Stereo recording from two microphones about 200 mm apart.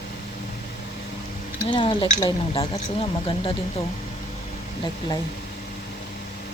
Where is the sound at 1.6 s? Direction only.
25° left (ahead or behind).